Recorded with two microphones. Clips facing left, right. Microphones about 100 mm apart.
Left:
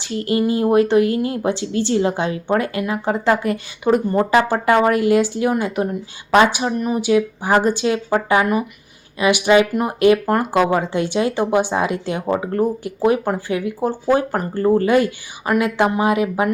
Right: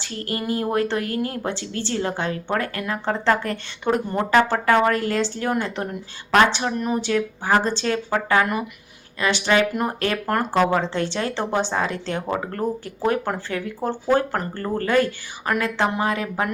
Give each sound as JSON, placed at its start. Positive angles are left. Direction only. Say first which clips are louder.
{"t": 0.0, "sound": "speech", "louder": "left 9 dB", "side_deg": 20}